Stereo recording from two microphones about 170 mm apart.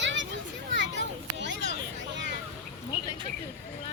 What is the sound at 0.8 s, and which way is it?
Children playing, 90° right.